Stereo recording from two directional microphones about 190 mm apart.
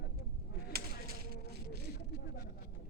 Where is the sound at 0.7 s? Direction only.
55° right (ahead or behind).